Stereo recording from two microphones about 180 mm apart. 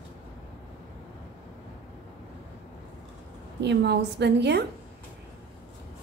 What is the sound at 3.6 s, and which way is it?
A woman's voice, 70° right (ahead or behind).